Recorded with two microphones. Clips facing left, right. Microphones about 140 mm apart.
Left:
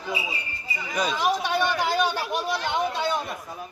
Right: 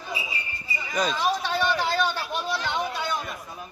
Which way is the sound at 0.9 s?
10° left (ahead or behind).